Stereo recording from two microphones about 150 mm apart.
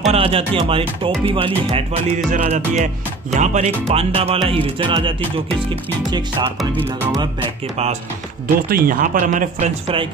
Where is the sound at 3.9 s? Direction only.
40° right (ahead or behind).